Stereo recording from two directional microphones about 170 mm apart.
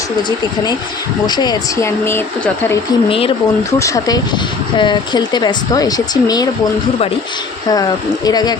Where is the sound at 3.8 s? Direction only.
20° left (ahead or behind).